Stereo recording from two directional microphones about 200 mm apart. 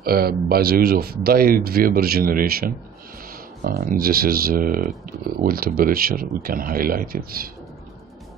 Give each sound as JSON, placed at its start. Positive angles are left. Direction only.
{"t": 0.0, "sound": "speech", "side_deg": -50}